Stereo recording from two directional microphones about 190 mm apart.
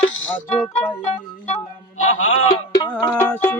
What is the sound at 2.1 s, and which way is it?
Music, 90° left.